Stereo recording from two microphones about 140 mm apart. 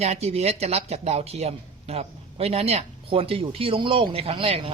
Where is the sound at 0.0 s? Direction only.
50° right (ahead or behind).